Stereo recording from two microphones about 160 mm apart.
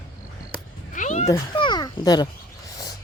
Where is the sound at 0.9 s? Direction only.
50° left (ahead or behind).